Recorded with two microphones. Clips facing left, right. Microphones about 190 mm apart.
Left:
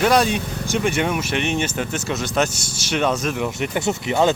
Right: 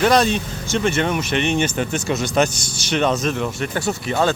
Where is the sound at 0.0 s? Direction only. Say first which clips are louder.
Right 1 dB; 10° left (ahead or behind).